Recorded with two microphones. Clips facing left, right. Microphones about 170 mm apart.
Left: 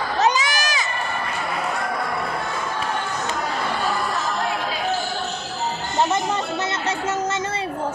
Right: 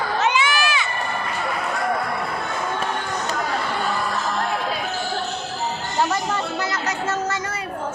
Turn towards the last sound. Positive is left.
turn(degrees=25)  # may be behind; listen again after turning